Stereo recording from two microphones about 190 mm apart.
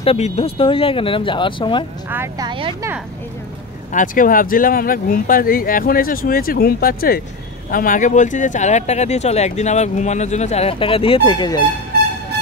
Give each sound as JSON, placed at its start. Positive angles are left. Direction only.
{"t": 0.0, "sound": "speech", "side_deg": 30}
{"t": 2.0, "sound": "speech", "side_deg": -10}
{"t": 2.4, "sound": "speech", "side_deg": -25}
{"t": 3.9, "sound": "speech", "side_deg": 45}